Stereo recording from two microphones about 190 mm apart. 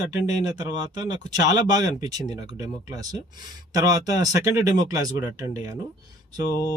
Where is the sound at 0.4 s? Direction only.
20° right (ahead or behind).